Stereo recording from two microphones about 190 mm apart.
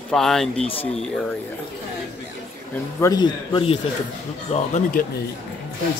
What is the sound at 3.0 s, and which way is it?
Speech, 20° left (ahead or behind).